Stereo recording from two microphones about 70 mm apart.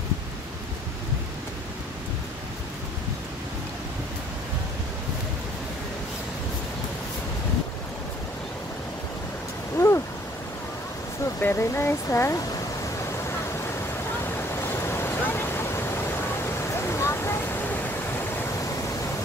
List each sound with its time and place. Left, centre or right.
9.8 s a sound: left
11.3 s speech: left
13.1 s waves: left